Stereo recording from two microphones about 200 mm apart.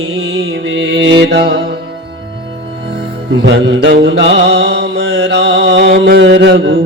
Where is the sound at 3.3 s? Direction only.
60° right (ahead or behind).